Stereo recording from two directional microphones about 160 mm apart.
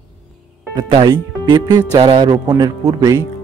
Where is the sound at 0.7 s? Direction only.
30° right (ahead or behind).